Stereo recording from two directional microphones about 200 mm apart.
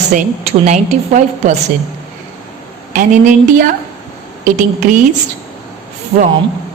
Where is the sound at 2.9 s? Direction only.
40° right (ahead or behind).